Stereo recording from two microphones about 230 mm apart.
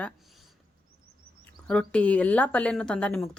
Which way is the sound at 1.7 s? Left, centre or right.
Centre.